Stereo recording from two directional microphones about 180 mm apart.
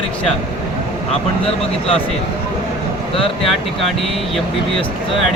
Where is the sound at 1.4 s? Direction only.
30° left (ahead or behind).